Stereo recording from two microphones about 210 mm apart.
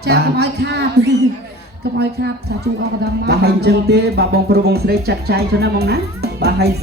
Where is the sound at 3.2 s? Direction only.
50° right (ahead or behind).